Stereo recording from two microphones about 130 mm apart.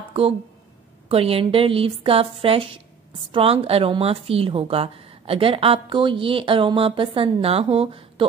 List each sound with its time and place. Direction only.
1.0 s a woman's voice: 50° right (ahead or behind)